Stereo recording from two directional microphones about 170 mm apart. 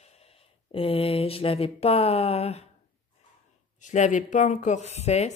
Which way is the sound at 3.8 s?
45° left (ahead or behind).